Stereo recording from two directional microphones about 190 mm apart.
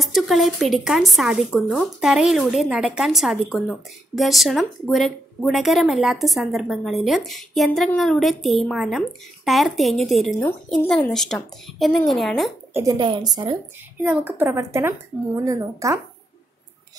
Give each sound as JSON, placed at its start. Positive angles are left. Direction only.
{"t": 0.0, "sound": "speech", "side_deg": 0}
{"t": 12.7, "sound": "a woman's voice", "side_deg": -20}
{"t": 14.0, "sound": "a woman's voice", "side_deg": -10}